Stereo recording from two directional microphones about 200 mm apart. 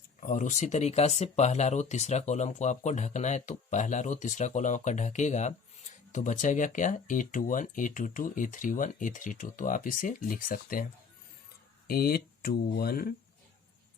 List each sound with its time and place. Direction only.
0.2 s speech: 40° left (ahead or behind)
11.9 s speech: 50° left (ahead or behind)